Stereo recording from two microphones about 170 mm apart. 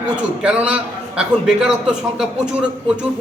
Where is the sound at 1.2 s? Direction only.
5° right (ahead or behind).